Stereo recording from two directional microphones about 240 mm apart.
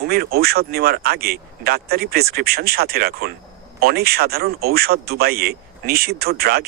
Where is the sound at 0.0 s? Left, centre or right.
Right.